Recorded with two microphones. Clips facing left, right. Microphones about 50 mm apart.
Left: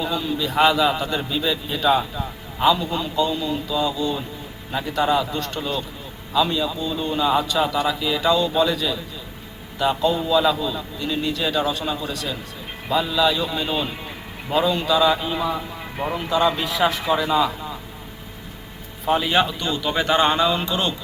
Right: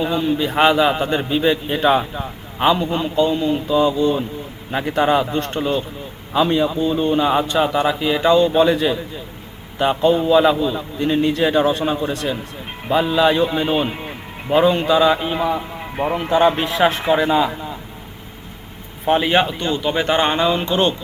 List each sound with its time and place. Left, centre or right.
0.0 s a man's voice: right
19.0 s speech: right